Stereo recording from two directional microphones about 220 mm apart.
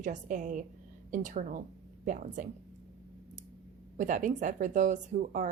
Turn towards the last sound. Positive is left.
turn(degrees=-35)  # may be behind; listen again after turning